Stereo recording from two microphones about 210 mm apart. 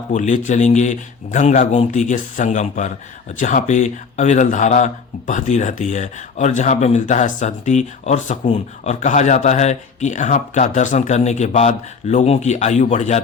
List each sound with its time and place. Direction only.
0.1 s speech: 35° left (ahead or behind)